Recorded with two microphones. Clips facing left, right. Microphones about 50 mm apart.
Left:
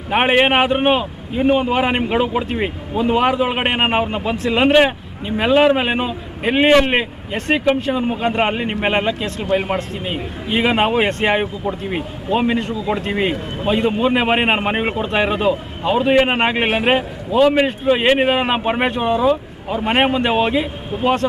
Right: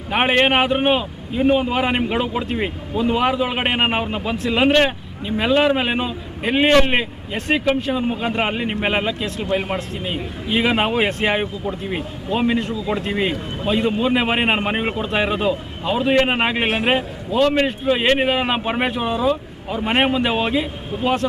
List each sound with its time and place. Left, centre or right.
0.1 s a man's voice: centre